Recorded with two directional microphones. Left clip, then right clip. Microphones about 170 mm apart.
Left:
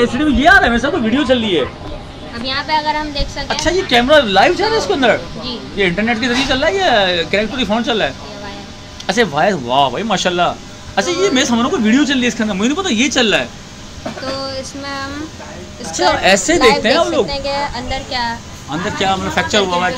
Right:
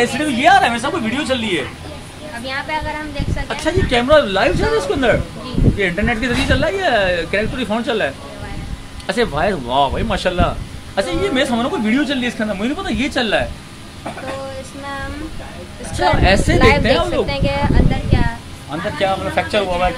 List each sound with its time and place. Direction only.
0.0 s speech: 15° right (ahead or behind)
2.4 s speech: 5° left (ahead or behind)
16.0 s speech: centre (ahead or behind)
16.5 s speech: 30° right (ahead or behind)
16.8 s speech: 5° right (ahead or behind)
17.3 s speech: 25° right (ahead or behind)
18.9 s speech: 5° left (ahead or behind)